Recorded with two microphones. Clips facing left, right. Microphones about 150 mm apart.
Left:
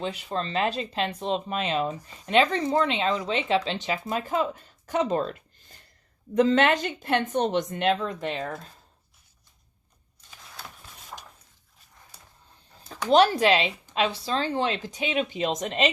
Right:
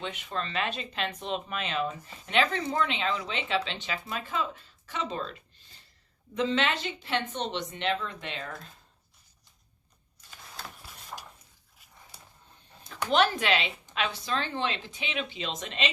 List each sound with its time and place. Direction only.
0.0 s a woman's voice: 35° left (ahead or behind)
12.9 s a woman's voice: 35° left (ahead or behind)